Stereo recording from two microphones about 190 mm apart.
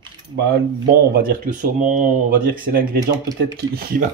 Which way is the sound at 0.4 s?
55° right (ahead or behind).